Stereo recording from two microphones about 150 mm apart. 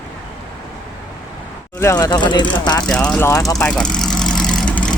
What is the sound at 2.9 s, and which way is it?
Speech, 5° left (ahead or behind).